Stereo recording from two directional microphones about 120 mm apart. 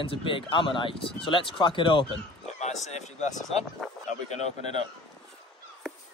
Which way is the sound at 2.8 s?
75° left (ahead or behind).